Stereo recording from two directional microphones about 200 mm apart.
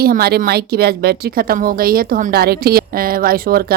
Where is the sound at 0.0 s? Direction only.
50° right (ahead or behind).